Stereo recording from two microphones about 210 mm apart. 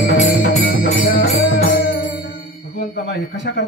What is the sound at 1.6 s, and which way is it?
Music, 50° left (ahead or behind).